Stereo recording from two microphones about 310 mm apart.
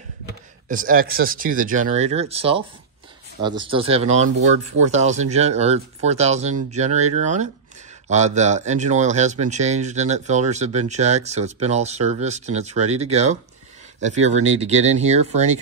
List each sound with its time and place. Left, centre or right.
0.7 s speech: right